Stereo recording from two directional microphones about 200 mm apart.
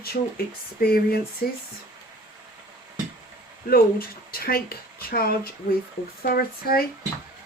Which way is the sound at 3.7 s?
50° left (ahead or behind).